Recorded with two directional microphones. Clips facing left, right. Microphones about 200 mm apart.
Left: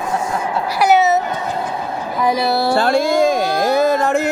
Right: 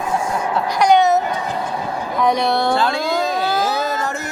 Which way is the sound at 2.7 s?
50° left (ahead or behind).